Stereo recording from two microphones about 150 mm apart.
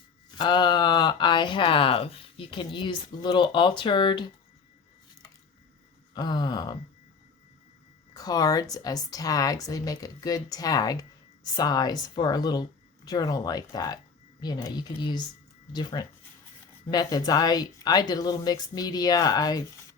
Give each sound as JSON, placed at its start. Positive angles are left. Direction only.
{"t": 0.3, "sound": "speech", "side_deg": 30}
{"t": 6.1, "sound": "a woman's voice", "side_deg": 30}
{"t": 8.1, "sound": "a woman's voice", "side_deg": 25}